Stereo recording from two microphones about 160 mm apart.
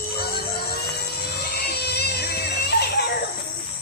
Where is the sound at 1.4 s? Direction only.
85° left.